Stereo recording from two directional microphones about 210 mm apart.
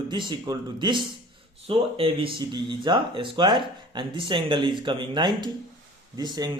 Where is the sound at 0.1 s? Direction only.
20° right (ahead or behind).